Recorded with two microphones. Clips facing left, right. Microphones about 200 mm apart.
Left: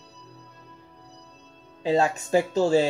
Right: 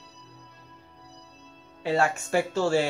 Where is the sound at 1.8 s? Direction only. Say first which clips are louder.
Left 3 dB; 20° left (ahead or behind).